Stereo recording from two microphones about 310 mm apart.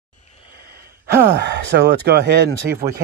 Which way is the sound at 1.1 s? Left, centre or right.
Right.